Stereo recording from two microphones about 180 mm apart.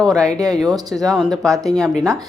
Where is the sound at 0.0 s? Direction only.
5° left (ahead or behind).